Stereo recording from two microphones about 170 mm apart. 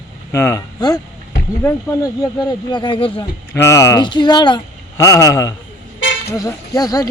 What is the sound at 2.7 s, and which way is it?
Speech, 30° left (ahead or behind).